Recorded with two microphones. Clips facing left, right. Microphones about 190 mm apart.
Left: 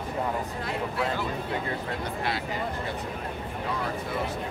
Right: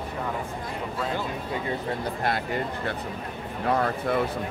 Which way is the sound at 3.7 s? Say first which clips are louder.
Right 9 dB; 55° right (ahead or behind).